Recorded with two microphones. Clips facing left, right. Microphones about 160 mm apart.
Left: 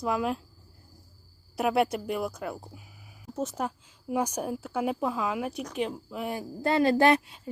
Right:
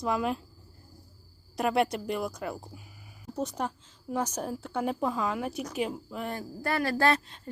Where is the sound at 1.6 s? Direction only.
5° left (ahead or behind).